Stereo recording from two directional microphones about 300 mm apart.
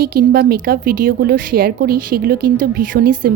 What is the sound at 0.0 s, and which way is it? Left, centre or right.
A woman's voice, right.